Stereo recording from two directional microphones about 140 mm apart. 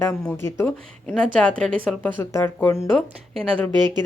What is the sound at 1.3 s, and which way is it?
A woman's voice, 10° left (ahead or behind).